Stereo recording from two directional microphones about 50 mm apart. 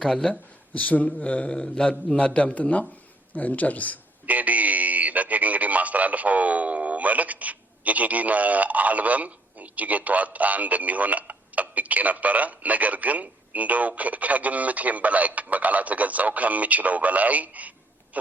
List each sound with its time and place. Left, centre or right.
0.0 s speech: centre
0.3 s speech: left
4.3 s speech: right